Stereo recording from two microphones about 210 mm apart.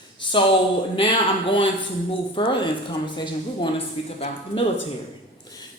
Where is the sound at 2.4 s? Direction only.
25° left (ahead or behind).